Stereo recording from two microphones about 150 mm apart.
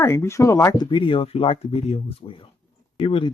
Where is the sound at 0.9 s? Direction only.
35° left (ahead or behind).